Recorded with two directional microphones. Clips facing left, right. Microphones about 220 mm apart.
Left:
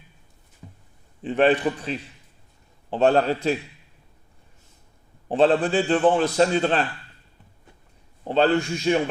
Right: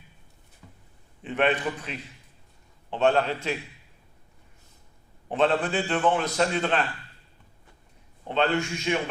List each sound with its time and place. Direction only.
0.6 s a sound: 30° left (ahead or behind)
1.2 s a man's voice: 35° left (ahead or behind)
5.3 s a man's voice: 30° left (ahead or behind)
8.2 s a man's voice: 35° left (ahead or behind)